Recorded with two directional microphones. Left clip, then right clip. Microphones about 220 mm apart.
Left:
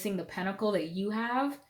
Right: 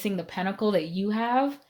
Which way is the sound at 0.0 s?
45° right (ahead or behind).